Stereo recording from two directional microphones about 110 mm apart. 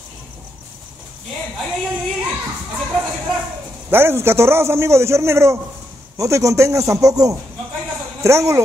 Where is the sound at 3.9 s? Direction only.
20° right (ahead or behind).